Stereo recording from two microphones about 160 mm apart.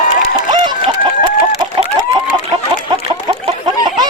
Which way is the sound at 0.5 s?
30° right (ahead or behind).